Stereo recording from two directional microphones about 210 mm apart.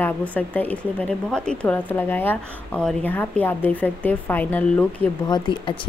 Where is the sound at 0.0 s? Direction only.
5° left (ahead or behind).